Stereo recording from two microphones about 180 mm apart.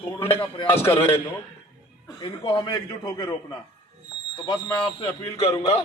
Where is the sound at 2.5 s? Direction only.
25° left (ahead or behind).